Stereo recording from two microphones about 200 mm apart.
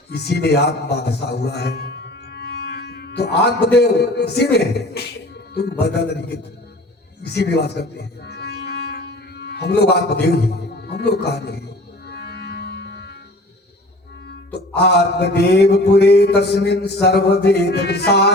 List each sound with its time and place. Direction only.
0.1 s a man's voice: 55° left (ahead or behind)
3.8 s a sound: 55° left (ahead or behind)
7.2 s music: 55° left (ahead or behind)
10.8 s speech: 55° left (ahead or behind)
12.0 s music: 55° left (ahead or behind)
14.8 s a sound: 55° left (ahead or behind)